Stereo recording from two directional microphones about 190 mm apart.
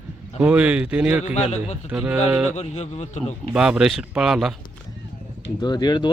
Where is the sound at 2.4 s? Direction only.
35° left (ahead or behind).